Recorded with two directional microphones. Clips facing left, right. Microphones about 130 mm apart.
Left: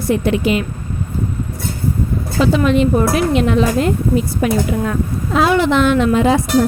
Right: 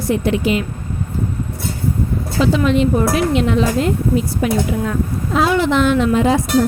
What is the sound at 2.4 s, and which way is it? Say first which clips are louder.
A woman's voice: left 1 dB; 55° left (ahead or behind).